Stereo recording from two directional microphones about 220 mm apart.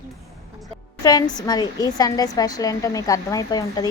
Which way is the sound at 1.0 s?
15° left (ahead or behind).